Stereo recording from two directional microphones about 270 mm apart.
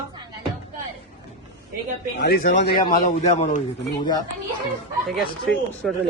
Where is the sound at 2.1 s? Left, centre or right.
Left.